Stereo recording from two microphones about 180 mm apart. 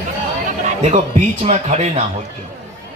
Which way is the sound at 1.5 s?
40° right (ahead or behind).